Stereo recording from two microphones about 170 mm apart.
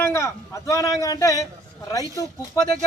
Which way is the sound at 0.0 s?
15° left (ahead or behind).